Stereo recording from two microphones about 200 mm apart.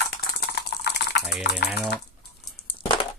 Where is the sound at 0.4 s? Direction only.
55° left (ahead or behind).